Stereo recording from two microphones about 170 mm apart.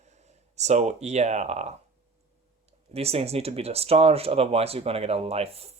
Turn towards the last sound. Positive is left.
turn(degrees=-35)  # may be behind; listen again after turning